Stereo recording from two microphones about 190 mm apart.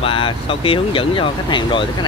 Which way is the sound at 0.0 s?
30° left (ahead or behind).